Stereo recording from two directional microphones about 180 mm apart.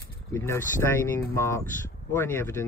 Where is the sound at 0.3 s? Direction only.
15° left (ahead or behind).